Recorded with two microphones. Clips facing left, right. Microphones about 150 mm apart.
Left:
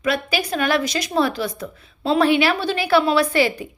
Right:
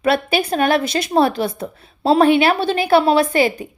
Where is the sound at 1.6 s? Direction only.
35° right (ahead or behind).